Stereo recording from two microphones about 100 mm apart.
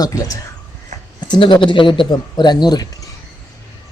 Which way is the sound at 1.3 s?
55° left (ahead or behind).